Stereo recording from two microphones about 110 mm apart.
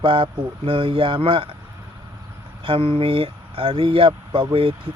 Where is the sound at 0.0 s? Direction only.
50° right (ahead or behind).